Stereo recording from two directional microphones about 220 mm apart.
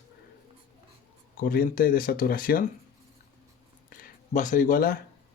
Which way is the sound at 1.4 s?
40° left (ahead or behind).